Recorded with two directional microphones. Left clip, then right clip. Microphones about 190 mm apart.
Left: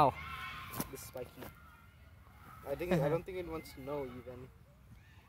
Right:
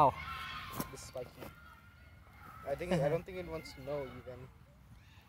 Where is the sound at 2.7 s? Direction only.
20° left (ahead or behind).